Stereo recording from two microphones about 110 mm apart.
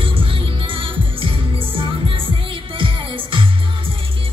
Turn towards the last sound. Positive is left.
turn(degrees=-55)  # may be behind; listen again after turning